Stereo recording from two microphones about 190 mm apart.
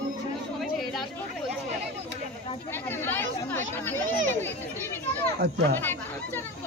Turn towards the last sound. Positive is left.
turn(degrees=-65)  # may be behind; listen again after turning